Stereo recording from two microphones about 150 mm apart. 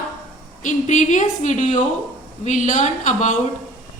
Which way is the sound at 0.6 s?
55° left (ahead or behind).